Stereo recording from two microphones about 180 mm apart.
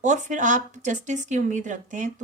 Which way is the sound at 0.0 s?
45° right (ahead or behind).